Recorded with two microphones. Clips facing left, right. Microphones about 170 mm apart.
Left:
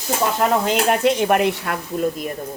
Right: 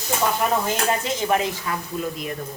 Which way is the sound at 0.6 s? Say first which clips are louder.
Left 6 dB; 70° left (ahead or behind).